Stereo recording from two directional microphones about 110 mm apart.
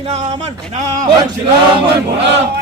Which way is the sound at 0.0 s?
80° right.